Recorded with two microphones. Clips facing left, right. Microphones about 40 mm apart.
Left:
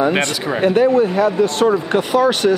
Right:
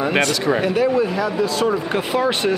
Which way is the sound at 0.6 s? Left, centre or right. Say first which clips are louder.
Left 8 dB; left.